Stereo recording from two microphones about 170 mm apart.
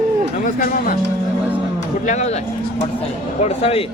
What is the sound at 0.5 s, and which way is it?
Speech, 55° left (ahead or behind).